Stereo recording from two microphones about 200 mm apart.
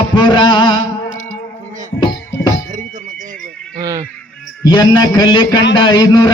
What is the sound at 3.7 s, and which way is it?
Honk, 15° right (ahead or behind).